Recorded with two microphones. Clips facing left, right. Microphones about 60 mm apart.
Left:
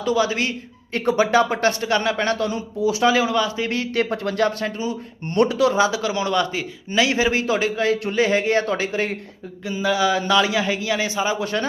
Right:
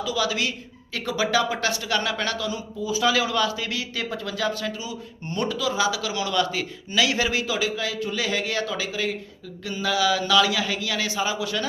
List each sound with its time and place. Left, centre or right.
0.0 s speech: left
2.4 s speech: left
3.0 s a man's voice: left
3.7 s speech: left
4.6 s speech: left
5.4 s speech: left
5.7 s a man's voice: left
7.4 s speech: left
9.6 s a man's voice: left